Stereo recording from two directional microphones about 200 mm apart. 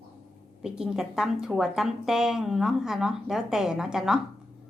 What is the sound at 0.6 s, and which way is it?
A woman's voice, 5° right (ahead or behind).